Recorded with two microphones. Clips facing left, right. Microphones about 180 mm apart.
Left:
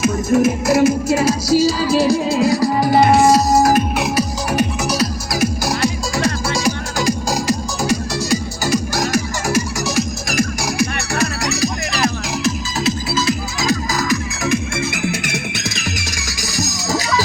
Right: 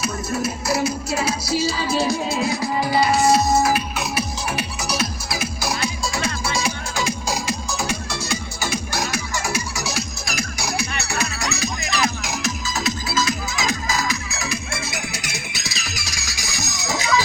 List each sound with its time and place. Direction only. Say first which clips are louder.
0.0 s music: left 10 dB; 50° left (ahead or behind)
3.3 s music: left 5 dB; 40° left (ahead or behind)